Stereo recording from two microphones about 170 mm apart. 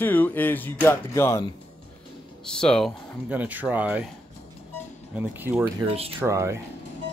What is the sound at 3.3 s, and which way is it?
Speech, 10° right (ahead or behind).